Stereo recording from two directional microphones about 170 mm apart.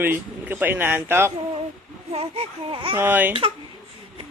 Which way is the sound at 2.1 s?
35° right (ahead or behind).